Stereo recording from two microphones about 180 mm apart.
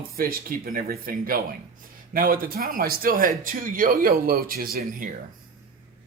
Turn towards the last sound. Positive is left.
turn(degrees=-55)  # may be behind; listen again after turning